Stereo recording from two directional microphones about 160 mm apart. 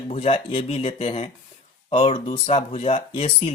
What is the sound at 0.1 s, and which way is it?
Speech, 35° left (ahead or behind).